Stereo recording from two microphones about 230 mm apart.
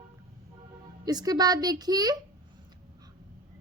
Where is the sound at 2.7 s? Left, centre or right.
Centre.